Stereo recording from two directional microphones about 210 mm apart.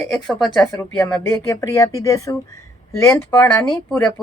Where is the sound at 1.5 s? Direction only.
15° left (ahead or behind).